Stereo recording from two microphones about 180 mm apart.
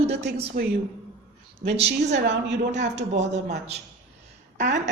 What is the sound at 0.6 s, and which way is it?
Speech, 50° right (ahead or behind).